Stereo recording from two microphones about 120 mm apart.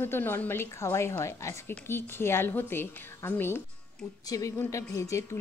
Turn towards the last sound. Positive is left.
turn(degrees=25)  # may be behind; listen again after turning